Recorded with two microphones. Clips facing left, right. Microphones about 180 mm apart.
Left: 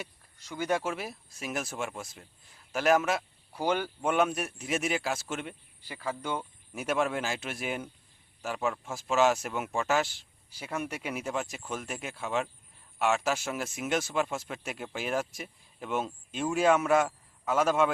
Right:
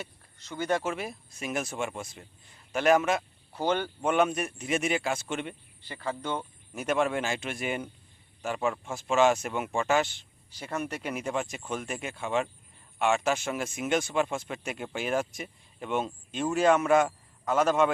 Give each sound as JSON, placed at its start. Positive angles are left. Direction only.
{"t": 0.0, "sound": "speech", "side_deg": 10}